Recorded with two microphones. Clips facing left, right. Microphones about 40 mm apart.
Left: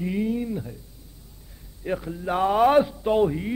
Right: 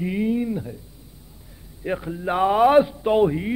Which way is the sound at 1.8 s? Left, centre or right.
Centre.